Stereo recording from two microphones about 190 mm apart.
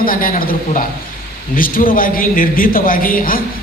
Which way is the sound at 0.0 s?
45° left (ahead or behind).